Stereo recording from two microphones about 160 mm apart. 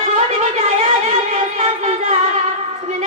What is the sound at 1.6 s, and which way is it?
Music, 40° right (ahead or behind).